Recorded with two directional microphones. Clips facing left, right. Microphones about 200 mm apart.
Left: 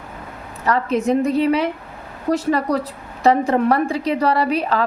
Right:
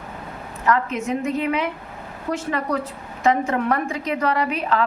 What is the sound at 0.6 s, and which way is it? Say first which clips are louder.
A woman's voice: left 3 dB; 35° left (ahead or behind).